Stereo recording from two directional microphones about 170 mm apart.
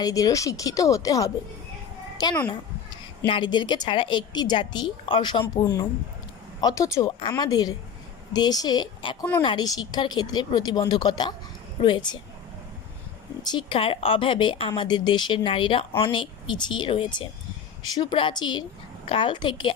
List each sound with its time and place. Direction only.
0.0 s a woman's voice: 20° left (ahead or behind)
13.4 s a woman's voice: 25° left (ahead or behind)